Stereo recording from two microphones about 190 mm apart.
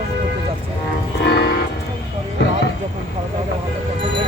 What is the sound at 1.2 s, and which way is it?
Music, 60° left (ahead or behind).